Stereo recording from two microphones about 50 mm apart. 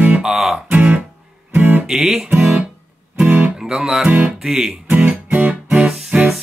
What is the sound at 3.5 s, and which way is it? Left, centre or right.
Music, centre.